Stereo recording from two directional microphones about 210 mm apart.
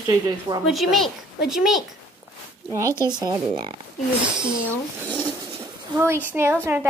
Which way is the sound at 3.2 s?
20° right (ahead or behind).